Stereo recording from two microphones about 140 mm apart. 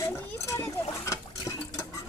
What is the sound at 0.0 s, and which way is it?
Splash, 20° left (ahead or behind).